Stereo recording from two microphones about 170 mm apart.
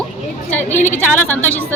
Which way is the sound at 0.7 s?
45° left (ahead or behind).